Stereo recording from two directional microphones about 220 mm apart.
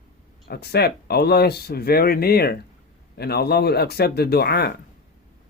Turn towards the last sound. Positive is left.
turn(degrees=45)  # may be behind; listen again after turning